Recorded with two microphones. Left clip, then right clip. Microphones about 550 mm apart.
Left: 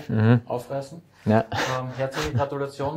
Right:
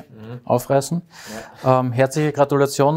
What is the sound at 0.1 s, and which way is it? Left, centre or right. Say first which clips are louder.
Speech: left 19 dB; left.